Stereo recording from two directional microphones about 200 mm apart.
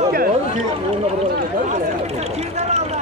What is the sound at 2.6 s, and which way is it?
Vehicle, 35° right (ahead or behind).